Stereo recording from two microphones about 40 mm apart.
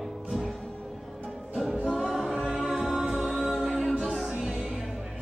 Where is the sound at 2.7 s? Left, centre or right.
Centre.